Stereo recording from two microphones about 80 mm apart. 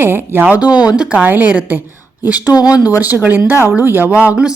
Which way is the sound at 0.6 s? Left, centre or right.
Left.